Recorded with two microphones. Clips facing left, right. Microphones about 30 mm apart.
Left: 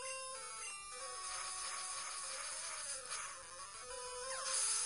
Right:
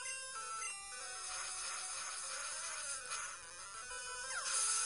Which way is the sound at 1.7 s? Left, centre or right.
Left.